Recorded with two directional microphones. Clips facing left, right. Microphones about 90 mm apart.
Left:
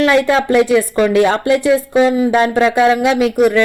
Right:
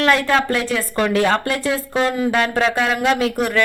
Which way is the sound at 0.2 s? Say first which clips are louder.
Left 6 dB; 20° left (ahead or behind).